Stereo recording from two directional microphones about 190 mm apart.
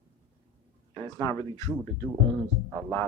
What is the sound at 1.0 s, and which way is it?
Speech, 15° left (ahead or behind).